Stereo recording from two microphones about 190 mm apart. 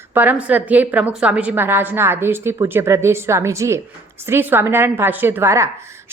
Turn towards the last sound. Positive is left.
turn(degrees=-15)  # may be behind; listen again after turning